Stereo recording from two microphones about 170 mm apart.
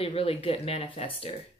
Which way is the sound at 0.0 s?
35° left (ahead or behind).